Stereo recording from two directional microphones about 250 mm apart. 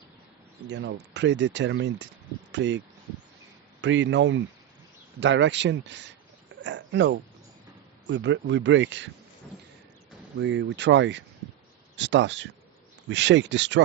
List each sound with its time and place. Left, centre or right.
0.7 s speech: right
10.4 s speech: right